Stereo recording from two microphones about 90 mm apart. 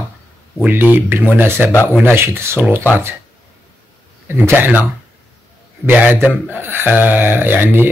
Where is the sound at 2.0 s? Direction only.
25° right (ahead or behind).